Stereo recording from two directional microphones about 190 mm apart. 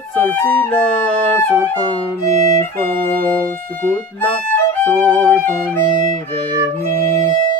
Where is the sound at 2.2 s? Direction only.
40° right (ahead or behind).